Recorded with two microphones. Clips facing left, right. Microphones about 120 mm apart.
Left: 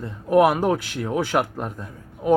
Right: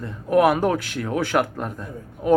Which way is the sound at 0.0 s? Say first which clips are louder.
Left 1 dB; 20° left (ahead or behind).